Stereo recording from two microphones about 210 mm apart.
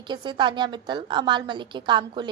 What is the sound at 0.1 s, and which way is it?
A woman's voice, 20° right (ahead or behind).